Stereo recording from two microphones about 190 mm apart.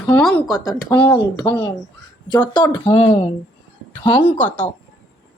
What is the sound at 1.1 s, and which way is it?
Speech, 20° left (ahead or behind).